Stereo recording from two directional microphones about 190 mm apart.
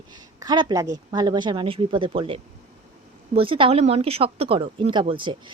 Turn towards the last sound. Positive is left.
turn(degrees=-25)  # may be behind; listen again after turning